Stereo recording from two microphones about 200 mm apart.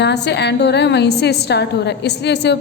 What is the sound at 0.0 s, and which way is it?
A woman's voice, 60° left (ahead or behind).